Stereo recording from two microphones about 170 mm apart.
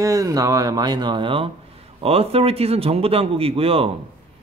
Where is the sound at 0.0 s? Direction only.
20° right (ahead or behind).